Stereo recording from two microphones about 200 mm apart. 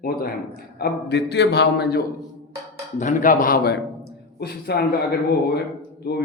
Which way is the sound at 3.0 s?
40° left (ahead or behind).